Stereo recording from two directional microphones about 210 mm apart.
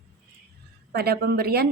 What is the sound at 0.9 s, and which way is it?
Speech, 50° right (ahead or behind).